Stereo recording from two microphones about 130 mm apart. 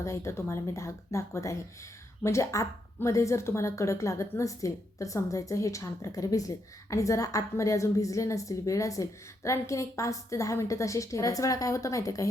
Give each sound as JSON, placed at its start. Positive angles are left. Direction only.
{"t": 0.0, "sound": "speech", "side_deg": 20}